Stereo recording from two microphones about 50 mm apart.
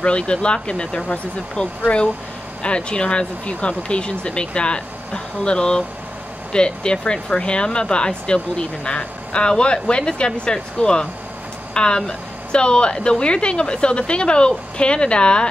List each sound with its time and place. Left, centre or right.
0.0 s speech: centre